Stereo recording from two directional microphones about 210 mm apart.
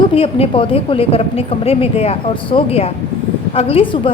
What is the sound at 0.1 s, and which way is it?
A woman's voice, 25° left (ahead or behind).